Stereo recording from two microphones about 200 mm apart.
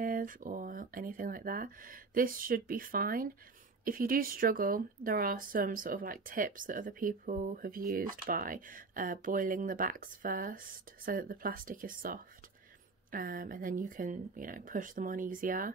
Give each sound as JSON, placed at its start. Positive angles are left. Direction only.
{"t": 0.0, "sound": "a woman's voice", "side_deg": -45}